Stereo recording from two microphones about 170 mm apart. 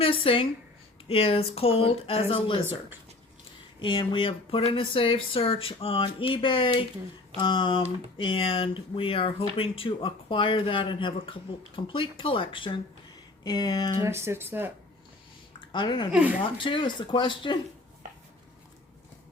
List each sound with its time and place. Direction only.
0.0 s speech: 35° left (ahead or behind)
3.8 s speech: 30° left (ahead or behind)
14.0 s speech: 15° right (ahead or behind)
15.7 s speech: 30° left (ahead or behind)